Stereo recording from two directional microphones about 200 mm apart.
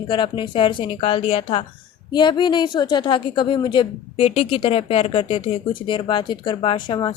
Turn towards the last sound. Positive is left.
turn(degrees=20)  # may be behind; listen again after turning